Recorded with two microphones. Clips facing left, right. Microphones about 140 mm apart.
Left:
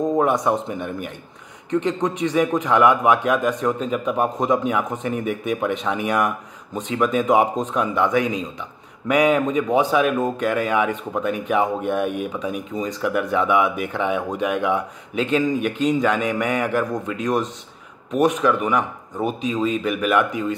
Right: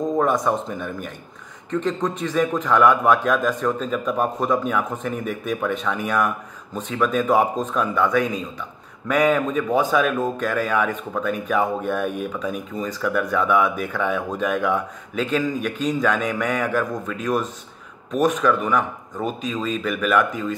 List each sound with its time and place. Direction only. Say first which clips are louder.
0.1 s a man's voice: right 1 dB; 15° left (ahead or behind)